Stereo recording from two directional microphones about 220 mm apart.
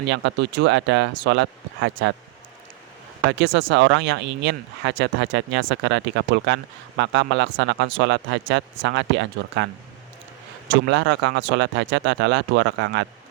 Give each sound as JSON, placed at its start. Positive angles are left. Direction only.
{"t": 0.0, "sound": "speech", "side_deg": -50}
{"t": 3.2, "sound": "speech", "side_deg": -55}
{"t": 10.8, "sound": "speech", "side_deg": -55}